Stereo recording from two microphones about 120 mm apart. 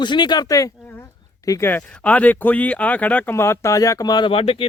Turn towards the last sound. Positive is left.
turn(degrees=50)  # may be behind; listen again after turning